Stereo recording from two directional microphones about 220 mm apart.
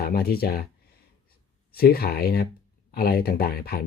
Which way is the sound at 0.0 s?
45° left (ahead or behind).